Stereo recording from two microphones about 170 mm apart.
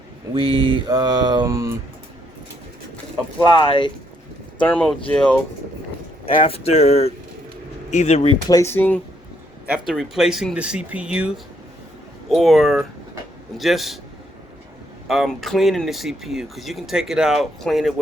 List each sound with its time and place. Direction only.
0.3 s mantra: 30° right (ahead or behind)
3.7 s speech: 30° left (ahead or behind)
4.6 s speech: 5° left (ahead or behind)
6.2 s speech: 35° left (ahead or behind)
8.4 s speech: 15° left (ahead or behind)
9.6 s speech: 5° right (ahead or behind)
15.0 s speech: centre (ahead or behind)